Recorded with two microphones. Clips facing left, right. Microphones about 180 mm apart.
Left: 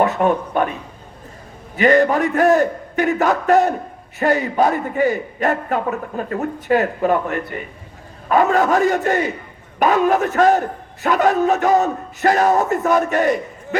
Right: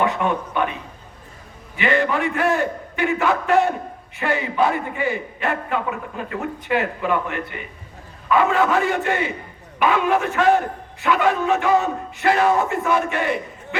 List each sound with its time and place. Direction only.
0.0 s a man's voice: 40° left (ahead or behind)